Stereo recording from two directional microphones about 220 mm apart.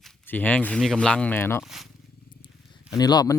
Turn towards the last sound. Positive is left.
turn(degrees=20)  # may be behind; listen again after turning